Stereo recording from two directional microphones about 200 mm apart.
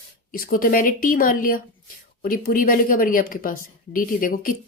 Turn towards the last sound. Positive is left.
turn(degrees=45)  # may be behind; listen again after turning